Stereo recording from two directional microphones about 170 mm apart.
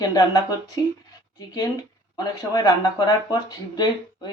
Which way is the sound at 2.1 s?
20° left (ahead or behind).